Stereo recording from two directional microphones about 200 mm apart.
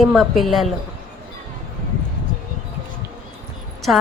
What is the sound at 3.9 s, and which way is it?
Speech, 5° right (ahead or behind).